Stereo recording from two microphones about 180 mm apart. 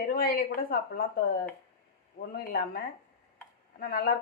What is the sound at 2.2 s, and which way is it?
Speech, 55° left (ahead or behind).